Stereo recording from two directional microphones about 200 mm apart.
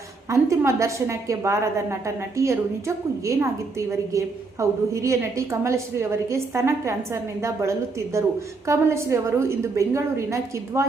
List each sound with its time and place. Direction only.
0.3 s a woman's voice: 15° right (ahead or behind)